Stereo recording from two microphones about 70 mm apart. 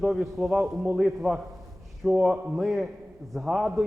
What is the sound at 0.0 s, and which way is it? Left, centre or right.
A man's voice, centre.